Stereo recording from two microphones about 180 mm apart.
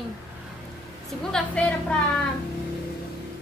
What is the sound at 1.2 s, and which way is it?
Speech, 5° left (ahead or behind).